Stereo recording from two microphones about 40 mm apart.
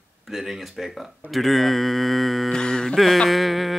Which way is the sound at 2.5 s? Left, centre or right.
Centre.